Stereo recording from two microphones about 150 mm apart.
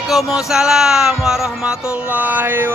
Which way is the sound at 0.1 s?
Centre (ahead or behind).